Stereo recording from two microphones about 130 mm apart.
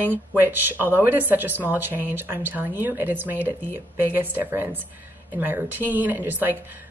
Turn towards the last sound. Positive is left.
turn(degrees=-15)  # may be behind; listen again after turning